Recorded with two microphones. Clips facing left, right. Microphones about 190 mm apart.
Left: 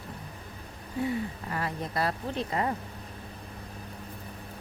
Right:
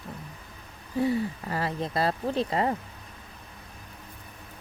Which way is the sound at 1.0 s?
30° right (ahead or behind).